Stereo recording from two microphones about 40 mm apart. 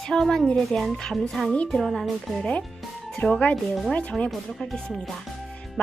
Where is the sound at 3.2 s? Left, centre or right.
Left.